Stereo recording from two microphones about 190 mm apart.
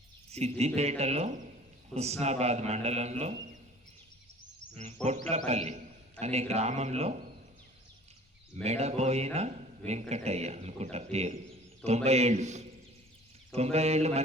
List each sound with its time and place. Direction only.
0.3 s a man's voice: 35° right (ahead or behind)
5.0 s a man's voice: 35° right (ahead or behind)
8.6 s a man's voice: 35° right (ahead or behind)